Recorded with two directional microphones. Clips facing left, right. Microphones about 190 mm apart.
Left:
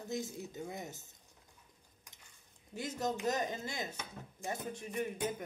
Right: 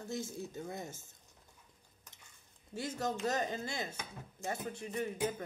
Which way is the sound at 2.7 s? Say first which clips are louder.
Even; 20° left (ahead or behind).